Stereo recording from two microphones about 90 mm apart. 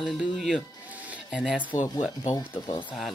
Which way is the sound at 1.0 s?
10° right (ahead or behind).